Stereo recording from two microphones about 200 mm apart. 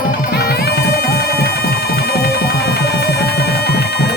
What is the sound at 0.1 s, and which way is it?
Music, 50° left (ahead or behind).